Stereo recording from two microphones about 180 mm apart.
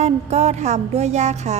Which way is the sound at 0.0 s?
35° right (ahead or behind).